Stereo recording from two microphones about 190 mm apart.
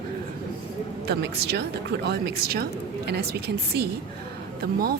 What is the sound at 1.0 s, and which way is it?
Speech, 60° right (ahead or behind).